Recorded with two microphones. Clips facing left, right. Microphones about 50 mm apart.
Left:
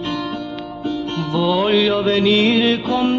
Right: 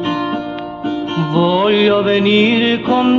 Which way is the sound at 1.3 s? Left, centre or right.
Right.